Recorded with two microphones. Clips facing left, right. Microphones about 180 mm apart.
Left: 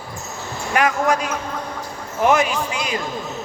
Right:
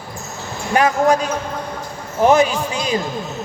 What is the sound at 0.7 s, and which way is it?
A man's voice, 30° right (ahead or behind).